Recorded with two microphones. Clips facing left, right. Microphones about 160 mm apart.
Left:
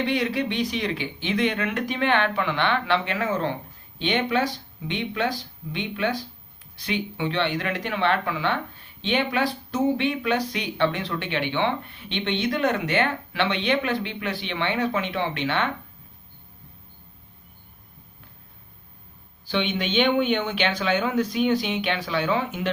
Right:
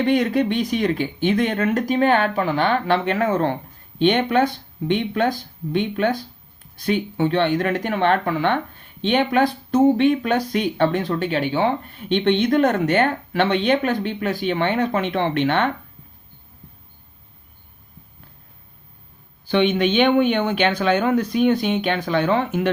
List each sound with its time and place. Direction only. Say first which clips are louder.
0.0 s speech: right 6 dB; 50° right (ahead or behind)
19.5 s speech: right 8 dB; 55° right (ahead or behind)